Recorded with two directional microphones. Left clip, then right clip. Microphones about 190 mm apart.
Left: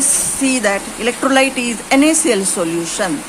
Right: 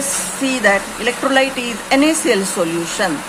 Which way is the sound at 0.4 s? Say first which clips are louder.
Right 2 dB; 20° left (ahead or behind).